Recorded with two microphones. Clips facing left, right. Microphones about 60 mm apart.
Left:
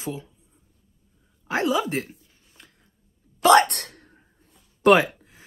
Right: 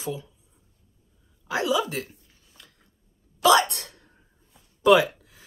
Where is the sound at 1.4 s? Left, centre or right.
Left.